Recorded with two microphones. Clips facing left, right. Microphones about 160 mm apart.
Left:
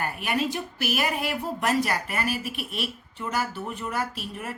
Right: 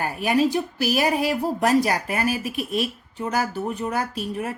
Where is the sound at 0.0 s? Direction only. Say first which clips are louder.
Right 7 dB; 40° right (ahead or behind).